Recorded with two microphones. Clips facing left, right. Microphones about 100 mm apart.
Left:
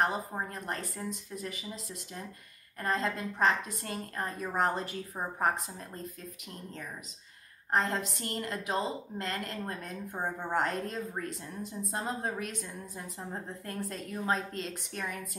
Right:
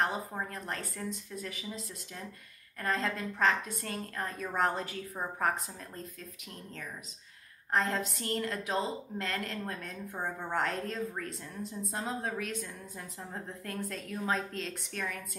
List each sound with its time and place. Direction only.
0.5 s a woman's voice: centre (ahead or behind)
2.8 s a woman's voice: centre (ahead or behind)
7.7 s a woman's voice: centre (ahead or behind)
10.1 s a woman's voice: 25° left (ahead or behind)
10.5 s a woman's voice: centre (ahead or behind)